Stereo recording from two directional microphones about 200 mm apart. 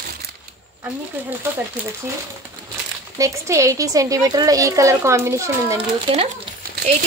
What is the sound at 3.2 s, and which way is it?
Speech, 15° right (ahead or behind).